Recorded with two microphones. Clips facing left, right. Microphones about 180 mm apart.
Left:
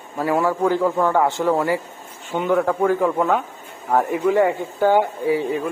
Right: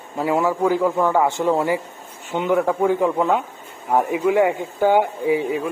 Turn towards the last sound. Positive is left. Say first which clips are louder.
# even
turn(degrees=-15)  # may be behind; listen again after turning